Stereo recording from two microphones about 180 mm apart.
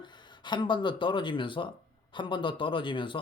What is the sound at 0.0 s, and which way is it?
Speech, 25° left (ahead or behind).